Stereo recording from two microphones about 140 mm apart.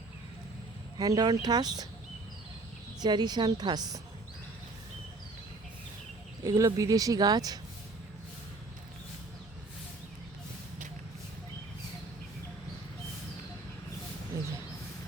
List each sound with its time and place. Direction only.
0.9 s speech: 25° right (ahead or behind)
3.0 s speech: 30° right (ahead or behind)
6.4 s speech: 25° right (ahead or behind)